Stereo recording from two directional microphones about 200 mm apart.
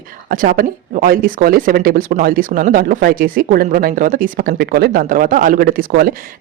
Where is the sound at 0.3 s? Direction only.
45° right (ahead or behind).